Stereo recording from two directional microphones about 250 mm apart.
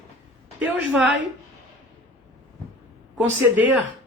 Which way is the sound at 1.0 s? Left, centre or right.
Right.